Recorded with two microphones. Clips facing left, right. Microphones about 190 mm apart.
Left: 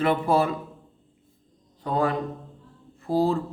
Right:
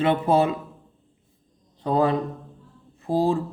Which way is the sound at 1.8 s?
30° right (ahead or behind).